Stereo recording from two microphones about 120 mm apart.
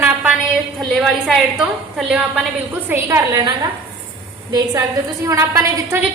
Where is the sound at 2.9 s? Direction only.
25° right (ahead or behind).